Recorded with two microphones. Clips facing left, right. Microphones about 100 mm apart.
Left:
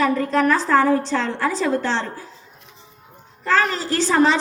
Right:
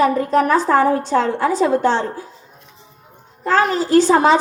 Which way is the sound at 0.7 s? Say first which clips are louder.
Right 2 dB; 20° right (ahead or behind).